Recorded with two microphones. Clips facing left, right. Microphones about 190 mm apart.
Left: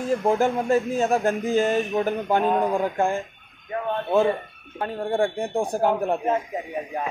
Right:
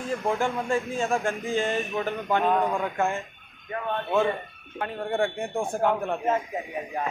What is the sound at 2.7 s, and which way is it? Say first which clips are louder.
Speech: left 4 dB; 35° left (ahead or behind).